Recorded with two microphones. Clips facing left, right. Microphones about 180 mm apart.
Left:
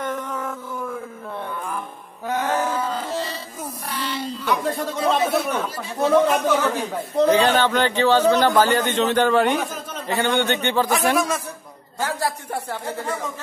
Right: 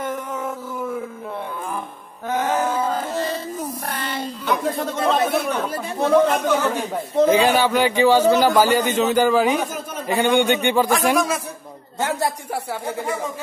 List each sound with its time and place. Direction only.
2.9 s music: 50° right (ahead or behind)
3.9 s a sound: 50° right (ahead or behind)
4.5 s speech: centre (ahead or behind)
7.2 s a man's voice: 10° right (ahead or behind)
10.0 s a man's voice: 15° right (ahead or behind)
12.0 s a man's voice: 20° right (ahead or behind)